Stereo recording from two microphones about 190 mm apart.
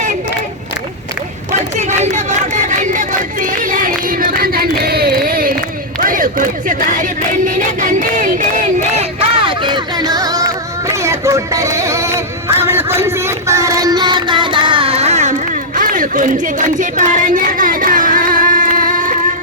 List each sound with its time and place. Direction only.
1.7 s crowd: 35° right (ahead or behind)